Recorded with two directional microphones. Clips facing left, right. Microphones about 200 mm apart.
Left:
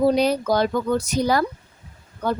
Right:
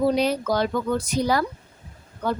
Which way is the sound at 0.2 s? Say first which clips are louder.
Left 3 dB; 40° left (ahead or behind).